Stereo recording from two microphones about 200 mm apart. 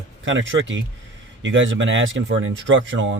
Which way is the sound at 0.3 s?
70° right (ahead or behind).